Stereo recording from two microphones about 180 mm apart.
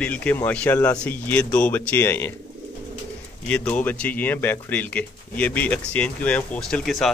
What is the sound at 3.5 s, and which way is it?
Speech, 5° left (ahead or behind).